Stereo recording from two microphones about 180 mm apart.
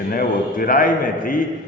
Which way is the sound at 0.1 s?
55° left (ahead or behind).